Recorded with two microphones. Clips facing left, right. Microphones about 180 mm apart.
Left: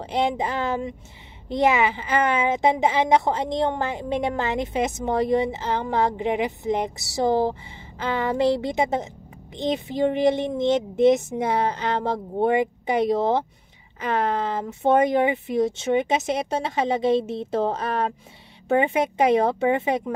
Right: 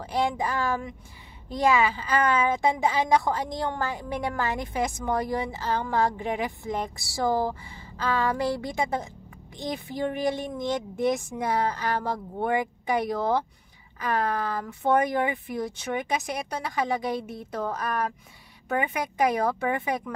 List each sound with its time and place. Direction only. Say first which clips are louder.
0.0 s a woman's voice: left 3 dB; 20° left (ahead or behind)